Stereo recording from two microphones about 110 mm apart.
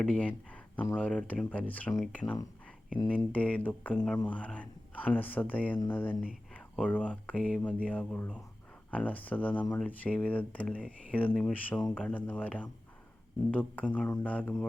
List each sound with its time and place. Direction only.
0.0 s speech: 10° left (ahead or behind)